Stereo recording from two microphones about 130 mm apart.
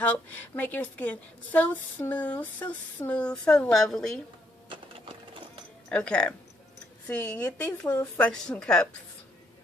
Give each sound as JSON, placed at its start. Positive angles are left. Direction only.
{"t": 0.0, "sound": "a woman's voice", "side_deg": 15}
{"t": 4.6, "sound": "sewing machine", "side_deg": -45}
{"t": 5.9, "sound": "a woman's voice", "side_deg": 5}